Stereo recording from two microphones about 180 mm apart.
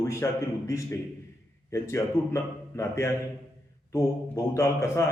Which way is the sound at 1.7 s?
15° left (ahead or behind).